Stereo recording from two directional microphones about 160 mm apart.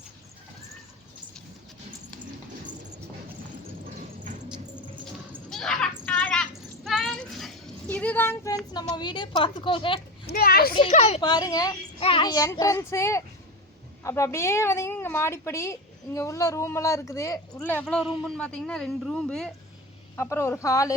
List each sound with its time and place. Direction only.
5.5 s a sound: centre (ahead or behind)
9.0 s a woman's voice: 30° left (ahead or behind)
10.2 s a child's voice: 75° left (ahead or behind)
10.8 s a child's voice: 45° left (ahead or behind)
11.2 s a child's voice: 25° left (ahead or behind)
11.9 s a child's voice: 35° left (ahead or behind); by 18.0 s 10° left (ahead or behind)
18.0 s speech: 5° right (ahead or behind)
18.3 s speech: 5° left (ahead or behind)
20.1 s a woman's voice: 15° left (ahead or behind)